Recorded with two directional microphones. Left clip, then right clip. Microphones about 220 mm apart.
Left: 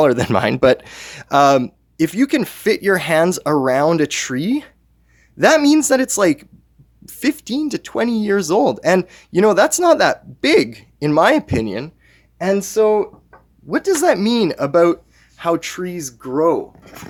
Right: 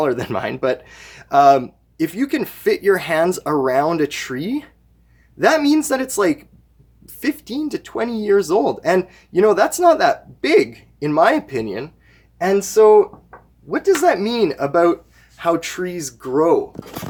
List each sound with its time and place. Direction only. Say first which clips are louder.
0.0 s speech: left 5 dB; 40° left (ahead or behind)
15.4 s speech: even; 25° left (ahead or behind)